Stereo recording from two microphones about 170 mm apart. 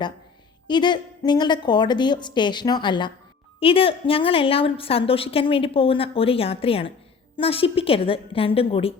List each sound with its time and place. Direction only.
0.7 s a woman's voice: 25° left (ahead or behind)